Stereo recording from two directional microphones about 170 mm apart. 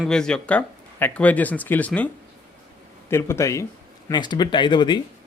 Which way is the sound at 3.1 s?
15° left (ahead or behind).